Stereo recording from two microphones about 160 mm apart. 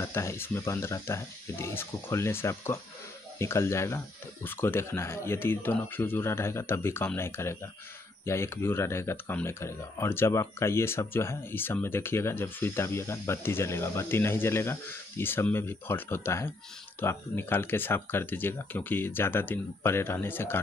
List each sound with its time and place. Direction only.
0.0 s speech: 15° left (ahead or behind)